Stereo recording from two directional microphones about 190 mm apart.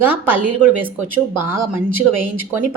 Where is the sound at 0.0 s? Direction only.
10° right (ahead or behind).